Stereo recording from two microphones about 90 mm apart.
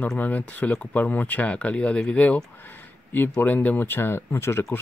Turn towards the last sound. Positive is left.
turn(degrees=30)  # may be behind; listen again after turning